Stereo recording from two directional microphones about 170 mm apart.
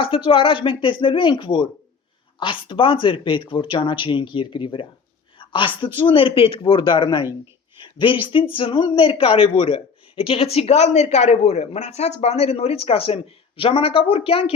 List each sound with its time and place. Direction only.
0.0 s speech: 35° left (ahead or behind)